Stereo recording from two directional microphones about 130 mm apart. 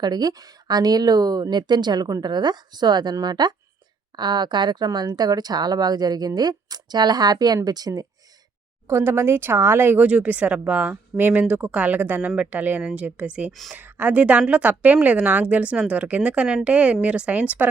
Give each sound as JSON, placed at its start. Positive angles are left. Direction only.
{"t": 0.0, "sound": "speech", "side_deg": -30}